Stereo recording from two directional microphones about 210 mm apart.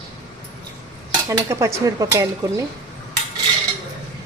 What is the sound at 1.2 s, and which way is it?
Speech, 15° right (ahead or behind).